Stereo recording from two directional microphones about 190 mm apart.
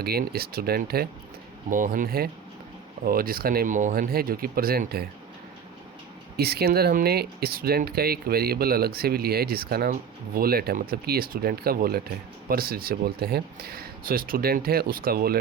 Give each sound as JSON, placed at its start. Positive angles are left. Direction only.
{"t": 0.0, "sound": "speech", "side_deg": -55}
{"t": 1.7, "sound": "speech", "side_deg": -45}
{"t": 6.3, "sound": "speech", "side_deg": -55}